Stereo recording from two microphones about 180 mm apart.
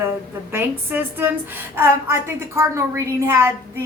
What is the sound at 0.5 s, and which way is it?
A woman's voice, 10° right (ahead or behind).